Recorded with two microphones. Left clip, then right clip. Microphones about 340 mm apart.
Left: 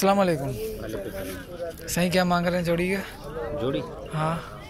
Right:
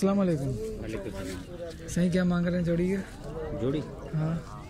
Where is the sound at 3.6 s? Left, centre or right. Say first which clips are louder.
Left 3 dB; left.